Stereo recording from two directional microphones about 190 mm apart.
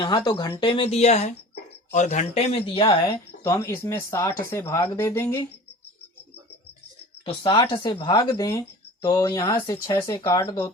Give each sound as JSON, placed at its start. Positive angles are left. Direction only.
{"t": 0.0, "sound": "speech", "side_deg": 20}
{"t": 3.4, "sound": "speech", "side_deg": 15}
{"t": 7.3, "sound": "speech", "side_deg": 25}